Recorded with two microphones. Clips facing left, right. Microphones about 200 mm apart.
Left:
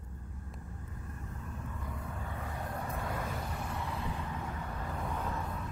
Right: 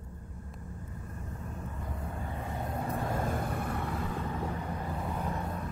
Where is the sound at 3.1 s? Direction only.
50° right (ahead or behind).